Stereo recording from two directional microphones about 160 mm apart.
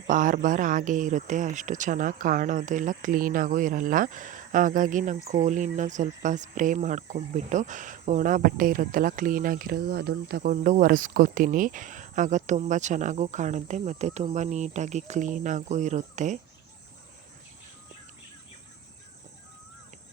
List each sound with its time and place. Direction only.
0.1 s speech: 55° right (ahead or behind)